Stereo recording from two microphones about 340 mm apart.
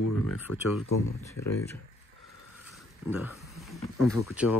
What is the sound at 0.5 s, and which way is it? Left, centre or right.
Speech, left.